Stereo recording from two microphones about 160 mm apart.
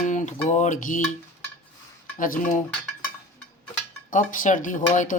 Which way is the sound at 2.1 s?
55° left (ahead or behind).